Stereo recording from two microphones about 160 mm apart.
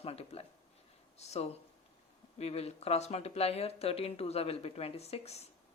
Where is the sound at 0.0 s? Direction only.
40° left (ahead or behind).